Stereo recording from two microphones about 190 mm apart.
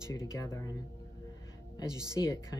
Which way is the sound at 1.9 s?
20° right (ahead or behind).